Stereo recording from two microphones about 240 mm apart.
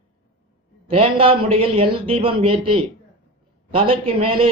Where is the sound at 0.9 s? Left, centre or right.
Right.